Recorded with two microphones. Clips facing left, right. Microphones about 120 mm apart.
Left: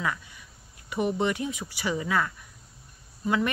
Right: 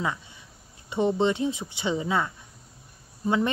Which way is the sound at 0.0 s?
25° right (ahead or behind).